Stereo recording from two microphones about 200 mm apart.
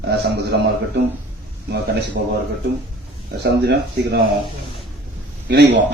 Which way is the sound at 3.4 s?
55° right (ahead or behind).